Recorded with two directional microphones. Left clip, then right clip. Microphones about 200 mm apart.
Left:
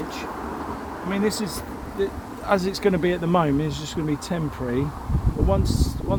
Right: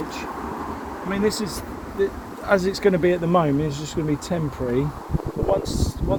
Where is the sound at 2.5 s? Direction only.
10° right (ahead or behind).